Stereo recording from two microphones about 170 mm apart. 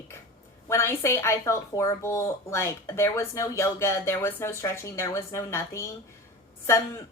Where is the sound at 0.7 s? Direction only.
15° left (ahead or behind).